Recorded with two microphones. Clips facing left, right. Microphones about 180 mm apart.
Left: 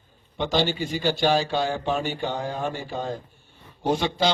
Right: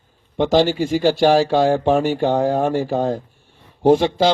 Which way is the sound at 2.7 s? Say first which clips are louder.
Right 12 dB; 90° right.